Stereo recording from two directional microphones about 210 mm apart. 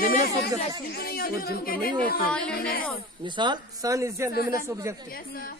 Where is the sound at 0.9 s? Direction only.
45° left (ahead or behind).